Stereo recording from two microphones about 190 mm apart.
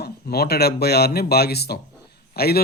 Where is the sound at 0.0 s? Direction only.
55° left (ahead or behind).